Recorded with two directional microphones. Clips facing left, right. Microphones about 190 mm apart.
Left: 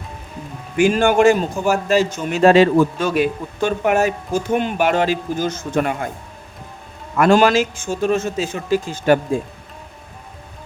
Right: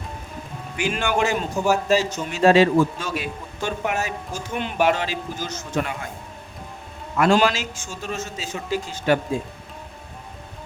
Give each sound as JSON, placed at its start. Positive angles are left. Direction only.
{"t": 0.8, "sound": "a man's voice", "side_deg": 45}
{"t": 7.2, "sound": "speech", "side_deg": 50}